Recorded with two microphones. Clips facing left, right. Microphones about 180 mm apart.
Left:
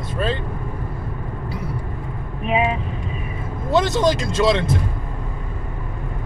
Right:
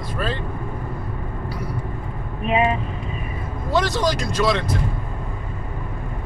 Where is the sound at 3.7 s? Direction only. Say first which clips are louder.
Left 3 dB; 25° left (ahead or behind).